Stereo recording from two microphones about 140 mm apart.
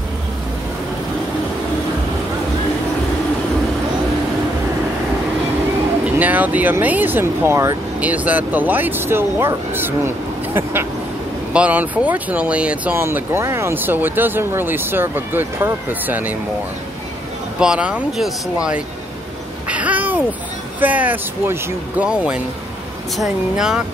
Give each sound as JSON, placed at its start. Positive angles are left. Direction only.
{"t": 6.1, "sound": "speech", "side_deg": -10}
{"t": 17.6, "sound": "speech", "side_deg": -5}
{"t": 19.7, "sound": "a sound", "side_deg": -10}
{"t": 20.8, "sound": "speech", "side_deg": -10}